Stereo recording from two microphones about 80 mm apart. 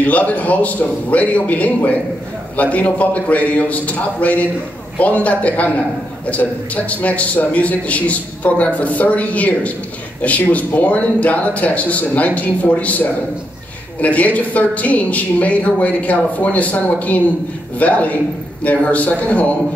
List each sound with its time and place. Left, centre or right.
0.0 s a man's voice: centre
14.0 s a man's voice: centre